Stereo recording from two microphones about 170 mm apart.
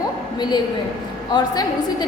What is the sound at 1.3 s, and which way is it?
Speech, 25° left (ahead or behind).